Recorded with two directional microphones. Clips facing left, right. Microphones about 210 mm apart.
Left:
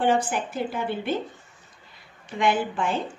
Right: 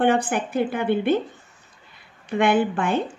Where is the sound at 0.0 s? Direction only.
60° right (ahead or behind).